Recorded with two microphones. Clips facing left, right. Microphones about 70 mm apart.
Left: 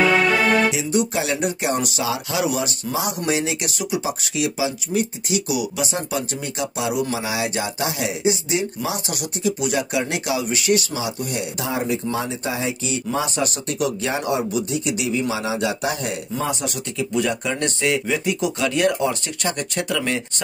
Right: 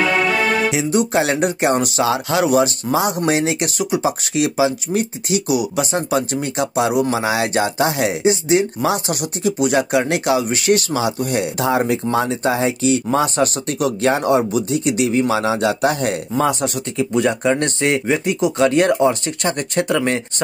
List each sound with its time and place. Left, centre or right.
0.0 s music: centre
0.7 s speech: right
5.9 s speech: right
16.6 s speech: right